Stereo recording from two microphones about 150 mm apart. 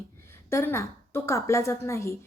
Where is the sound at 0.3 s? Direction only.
15° left (ahead or behind).